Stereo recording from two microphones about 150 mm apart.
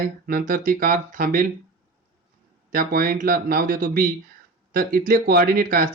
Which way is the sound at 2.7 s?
75° right (ahead or behind).